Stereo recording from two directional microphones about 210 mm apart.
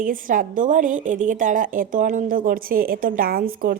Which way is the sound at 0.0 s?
40° right (ahead or behind).